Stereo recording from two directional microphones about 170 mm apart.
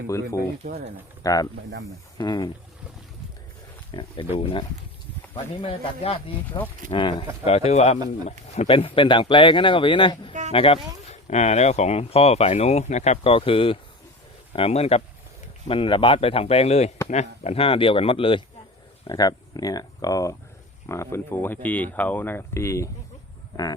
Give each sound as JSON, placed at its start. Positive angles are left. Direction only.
{"t": 0.1, "sound": "speech", "side_deg": 15}
{"t": 0.6, "sound": "speech", "side_deg": -55}
{"t": 1.2, "sound": "speech", "side_deg": 20}
{"t": 3.9, "sound": "speech", "side_deg": 30}